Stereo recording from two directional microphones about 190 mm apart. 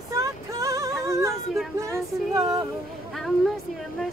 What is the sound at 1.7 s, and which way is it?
Music, 15° right (ahead or behind).